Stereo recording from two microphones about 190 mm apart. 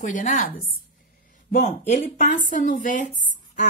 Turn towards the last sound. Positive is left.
turn(degrees=-40)  # may be behind; listen again after turning